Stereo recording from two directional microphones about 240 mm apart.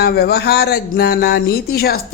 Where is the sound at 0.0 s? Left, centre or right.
Left.